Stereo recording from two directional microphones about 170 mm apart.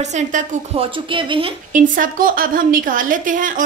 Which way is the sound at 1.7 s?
55° right (ahead or behind).